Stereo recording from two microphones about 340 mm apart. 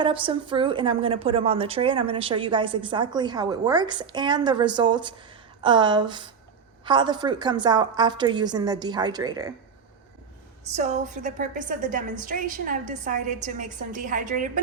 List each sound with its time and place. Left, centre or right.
0.0 s a woman's voice: centre
10.8 s a woman's voice: right